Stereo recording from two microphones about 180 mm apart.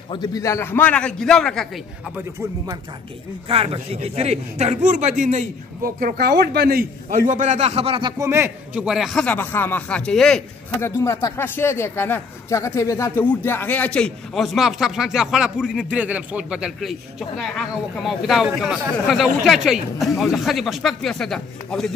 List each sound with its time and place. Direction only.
0.1 s a man's voice: 20° left (ahead or behind); by 1.7 s 5° left (ahead or behind)
3.4 s a man's voice: 30° right (ahead or behind)
5.9 s a man's voice: 55° right (ahead or behind); by 8.1 s 30° right (ahead or behind)
8.2 s speech: 15° right (ahead or behind); by 10.4 s 5° left (ahead or behind)
10.8 s a man's voice: 15° left (ahead or behind)